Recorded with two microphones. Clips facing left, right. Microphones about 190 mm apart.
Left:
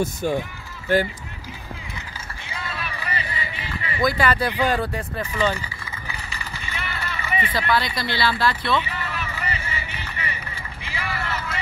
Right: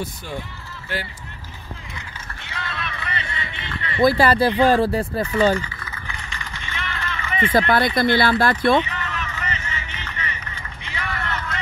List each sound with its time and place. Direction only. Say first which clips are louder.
0.0 s speech: left 7 dB; 45° left (ahead or behind)
2.5 s a sound: right 1 dB; 5° left (ahead or behind)
4.0 s speech: right 5 dB; 35° right (ahead or behind)
5.6 s typing: right 2 dB; 5° left (ahead or behind)
7.5 s speech: right 7 dB; 50° right (ahead or behind)
8.9 s vehicle: even; 5° left (ahead or behind)